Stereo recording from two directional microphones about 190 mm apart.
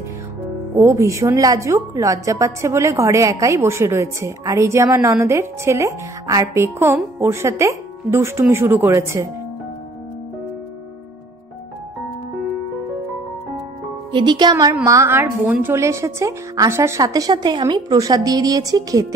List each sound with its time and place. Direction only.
0.7 s a woman's voice: 15° right (ahead or behind)
14.1 s a woman's voice: 25° right (ahead or behind)